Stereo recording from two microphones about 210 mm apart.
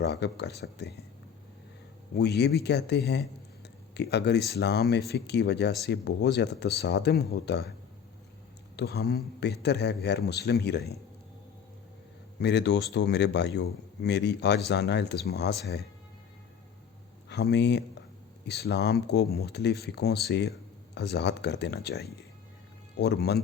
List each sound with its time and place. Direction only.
0.0 s speech: 50° left (ahead or behind)
2.1 s speech: 50° left (ahead or behind)
8.7 s speech: 50° left (ahead or behind)
12.4 s speech: 55° left (ahead or behind)
17.2 s speech: 55° left (ahead or behind)